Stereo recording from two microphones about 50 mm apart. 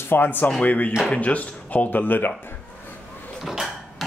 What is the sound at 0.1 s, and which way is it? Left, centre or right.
Speech, left.